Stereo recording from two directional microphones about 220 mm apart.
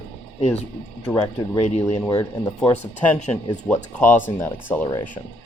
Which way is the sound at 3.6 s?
10° left (ahead or behind).